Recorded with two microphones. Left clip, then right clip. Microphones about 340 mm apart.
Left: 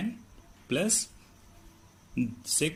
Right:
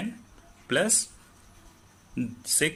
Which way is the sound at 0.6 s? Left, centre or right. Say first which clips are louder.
Right 4 dB; right.